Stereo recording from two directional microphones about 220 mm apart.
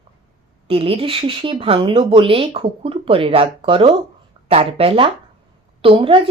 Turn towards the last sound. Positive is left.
turn(degrees=-25)  # may be behind; listen again after turning